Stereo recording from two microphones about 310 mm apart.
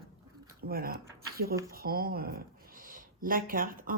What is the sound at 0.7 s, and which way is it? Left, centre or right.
Speech, right.